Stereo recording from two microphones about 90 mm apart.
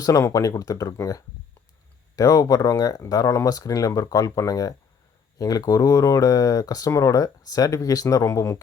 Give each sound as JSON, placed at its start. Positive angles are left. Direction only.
{"t": 0.0, "sound": "speech", "side_deg": 35}